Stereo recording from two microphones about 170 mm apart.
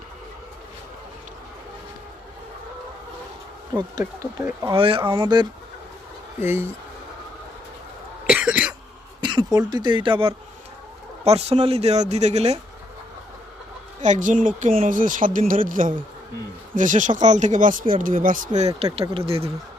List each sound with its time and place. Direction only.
4.0 s speech: 15° right (ahead or behind)
4.7 s speech: 30° right (ahead or behind)
6.4 s speech: 15° right (ahead or behind)
8.3 s cough: 10° right (ahead or behind)
9.2 s a sound: 25° right (ahead or behind)
9.6 s speech: 25° right (ahead or behind)
14.0 s speech: 45° right (ahead or behind)
18.9 s speech: 35° right (ahead or behind)